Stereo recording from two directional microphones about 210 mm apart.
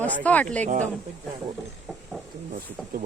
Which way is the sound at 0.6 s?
35° right (ahead or behind).